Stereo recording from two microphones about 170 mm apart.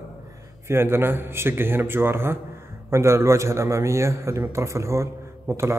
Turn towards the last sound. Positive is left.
turn(degrees=-15)  # may be behind; listen again after turning